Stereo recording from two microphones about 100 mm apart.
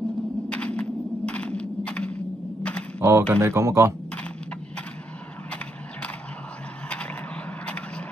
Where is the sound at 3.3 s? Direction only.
25° right (ahead or behind).